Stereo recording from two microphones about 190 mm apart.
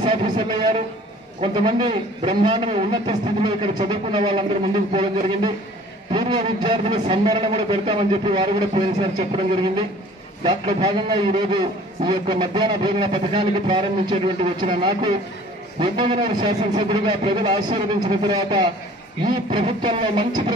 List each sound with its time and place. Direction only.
0.0 s a man's voice: 25° right (ahead or behind)